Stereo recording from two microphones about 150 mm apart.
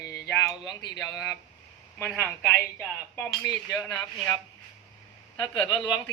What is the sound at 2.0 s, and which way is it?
Speech, 15° left (ahead or behind).